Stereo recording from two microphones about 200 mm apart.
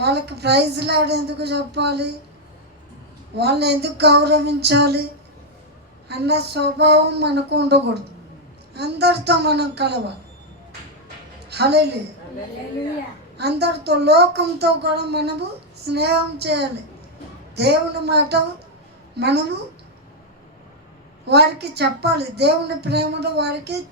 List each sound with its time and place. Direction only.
0.0 s a woman's voice: 55° right (ahead or behind)
3.3 s a woman's voice: 55° right (ahead or behind)
6.1 s a woman's voice: 55° right (ahead or behind)
11.4 s a woman's voice: 55° right (ahead or behind)
13.3 s a woman's voice: 55° right (ahead or behind)
21.2 s a woman's voice: 55° right (ahead or behind)